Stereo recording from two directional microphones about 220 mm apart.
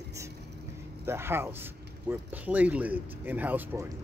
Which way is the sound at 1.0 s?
10° right (ahead or behind).